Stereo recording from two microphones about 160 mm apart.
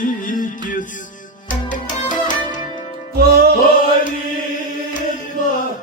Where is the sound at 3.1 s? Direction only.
75° right (ahead or behind).